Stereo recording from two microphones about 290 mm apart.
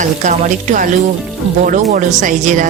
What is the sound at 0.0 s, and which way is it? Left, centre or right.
Speech, right.